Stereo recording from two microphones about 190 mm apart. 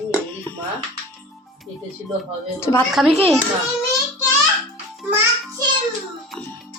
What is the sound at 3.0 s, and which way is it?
Speech, centre (ahead or behind).